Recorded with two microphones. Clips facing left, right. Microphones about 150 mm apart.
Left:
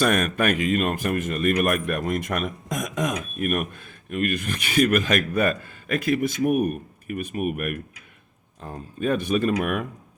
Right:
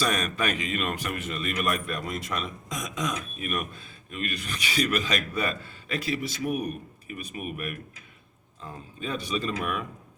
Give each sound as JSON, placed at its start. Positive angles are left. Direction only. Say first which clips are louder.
{"t": 0.0, "sound": "a man's voice", "louder": "left 6 dB", "side_deg": 50}